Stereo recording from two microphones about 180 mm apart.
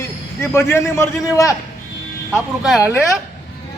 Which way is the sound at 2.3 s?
5° right (ahead or behind).